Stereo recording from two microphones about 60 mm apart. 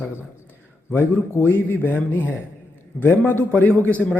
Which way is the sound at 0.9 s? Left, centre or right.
Left.